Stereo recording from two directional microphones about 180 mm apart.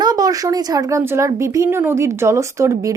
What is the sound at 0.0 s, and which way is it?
Speech, 20° right (ahead or behind).